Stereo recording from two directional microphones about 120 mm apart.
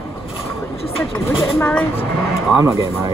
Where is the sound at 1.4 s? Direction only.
20° left (ahead or behind).